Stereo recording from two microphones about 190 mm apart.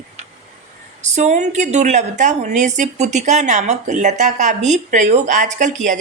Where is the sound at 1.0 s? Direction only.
40° right (ahead or behind).